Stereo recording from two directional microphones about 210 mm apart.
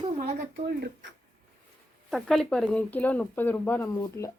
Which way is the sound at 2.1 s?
Centre (ahead or behind).